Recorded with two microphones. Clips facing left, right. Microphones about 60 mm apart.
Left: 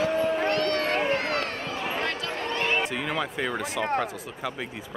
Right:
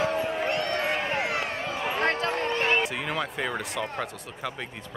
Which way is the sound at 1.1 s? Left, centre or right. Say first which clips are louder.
Left 1 dB; centre.